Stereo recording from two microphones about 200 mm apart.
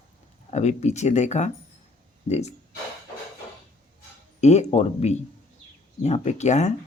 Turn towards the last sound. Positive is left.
turn(degrees=35)  # may be behind; listen again after turning